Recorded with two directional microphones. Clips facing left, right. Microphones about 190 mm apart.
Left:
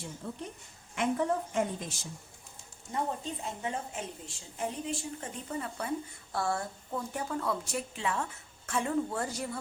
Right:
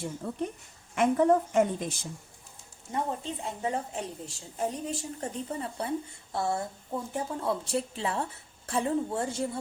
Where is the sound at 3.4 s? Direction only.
30° right (ahead or behind).